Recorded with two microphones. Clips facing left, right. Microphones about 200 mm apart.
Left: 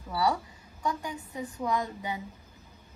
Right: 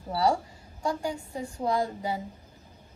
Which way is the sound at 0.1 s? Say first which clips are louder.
Right 3 dB; 30° right (ahead or behind).